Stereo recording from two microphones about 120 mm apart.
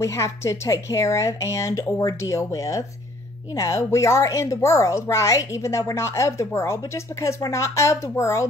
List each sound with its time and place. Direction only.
0.0 s speech: 25° left (ahead or behind)